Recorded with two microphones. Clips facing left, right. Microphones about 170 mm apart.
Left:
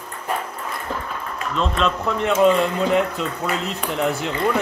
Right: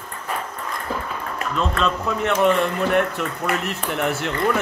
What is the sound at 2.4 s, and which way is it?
Speech, 20° left (ahead or behind).